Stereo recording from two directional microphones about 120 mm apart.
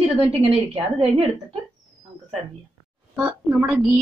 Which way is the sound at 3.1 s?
5° right (ahead or behind).